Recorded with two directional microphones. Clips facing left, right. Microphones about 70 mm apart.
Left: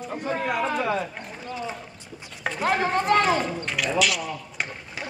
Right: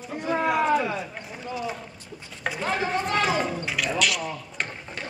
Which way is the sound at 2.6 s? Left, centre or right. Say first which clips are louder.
Left 4 dB; left.